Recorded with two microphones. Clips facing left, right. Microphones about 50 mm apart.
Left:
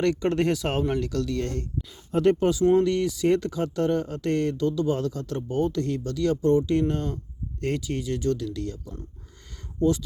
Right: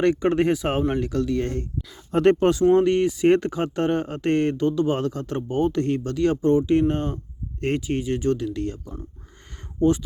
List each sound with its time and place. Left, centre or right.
0.0 s speech: right
2.1 s speech: right
2.7 s speech: right